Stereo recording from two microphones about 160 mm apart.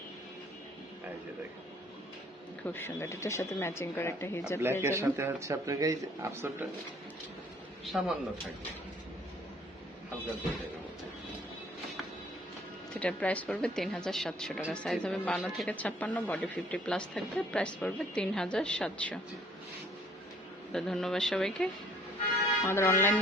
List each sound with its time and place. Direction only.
2.6 s speech: 15° left (ahead or behind)
4.8 s speech: 15° right (ahead or behind)
7.9 s speech: centre (ahead or behind)
13.0 s speech: 10° left (ahead or behind)
20.7 s speech: 5° left (ahead or behind)
22.6 s speech: 15° left (ahead or behind)